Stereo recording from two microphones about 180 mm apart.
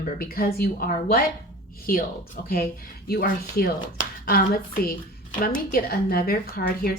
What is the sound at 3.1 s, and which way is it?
A woman's voice, 60° left (ahead or behind).